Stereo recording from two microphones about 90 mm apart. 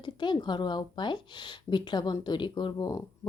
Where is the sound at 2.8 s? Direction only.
35° left (ahead or behind).